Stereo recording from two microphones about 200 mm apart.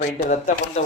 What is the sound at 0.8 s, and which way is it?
Speech, 35° left (ahead or behind).